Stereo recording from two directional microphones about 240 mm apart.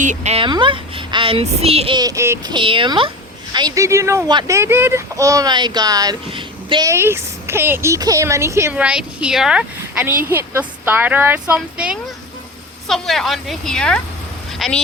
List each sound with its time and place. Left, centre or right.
0.0 s a woman's voice: right; by 14.8 s centre